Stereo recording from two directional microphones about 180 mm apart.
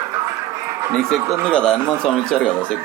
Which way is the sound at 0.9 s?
5° left (ahead or behind).